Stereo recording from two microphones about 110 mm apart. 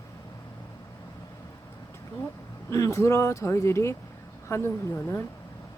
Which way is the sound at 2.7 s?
25° left (ahead or behind).